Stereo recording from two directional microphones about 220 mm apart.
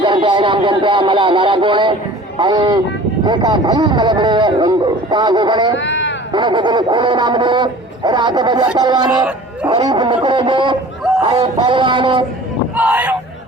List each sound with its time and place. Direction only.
0.0 s speech: 20° right (ahead or behind)
5.7 s a sound: 55° left (ahead or behind)
6.3 s speech: 20° right (ahead or behind)
12.7 s speech: 5° right (ahead or behind)